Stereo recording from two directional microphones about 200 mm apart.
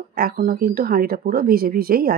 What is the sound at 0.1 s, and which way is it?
Speech, 50° right (ahead or behind).